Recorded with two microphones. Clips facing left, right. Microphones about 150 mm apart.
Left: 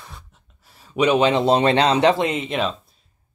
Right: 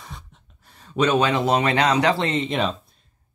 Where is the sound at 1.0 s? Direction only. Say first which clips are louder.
Left 3 dB; 20° left (ahead or behind).